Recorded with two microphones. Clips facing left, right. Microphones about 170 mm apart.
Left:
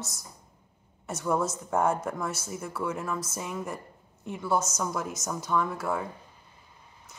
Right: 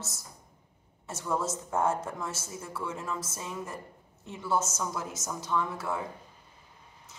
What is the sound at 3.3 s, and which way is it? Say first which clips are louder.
Speech: left 4 dB; 15° left (ahead or behind).